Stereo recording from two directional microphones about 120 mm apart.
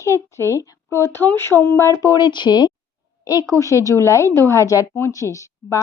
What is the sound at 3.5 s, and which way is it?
A woman's voice, 25° left (ahead or behind).